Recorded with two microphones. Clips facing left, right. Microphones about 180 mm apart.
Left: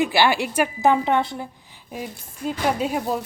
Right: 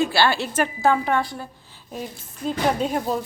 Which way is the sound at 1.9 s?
10° left (ahead or behind).